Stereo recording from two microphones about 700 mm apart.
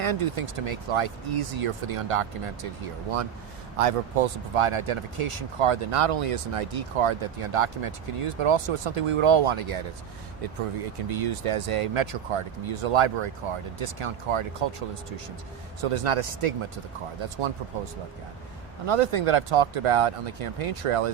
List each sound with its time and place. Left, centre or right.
0.0 s speech: right
3.8 s speech: right
11.1 s speech: right
15.8 s speech: right
18.9 s speech: right